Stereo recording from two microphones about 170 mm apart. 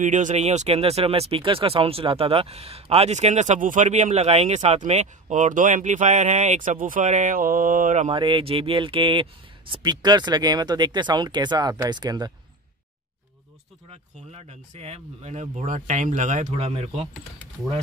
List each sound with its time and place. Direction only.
0.0 s speech: 45° right (ahead or behind)
8.1 s speech: 30° right (ahead or behind)
13.8 s speech: 40° right (ahead or behind)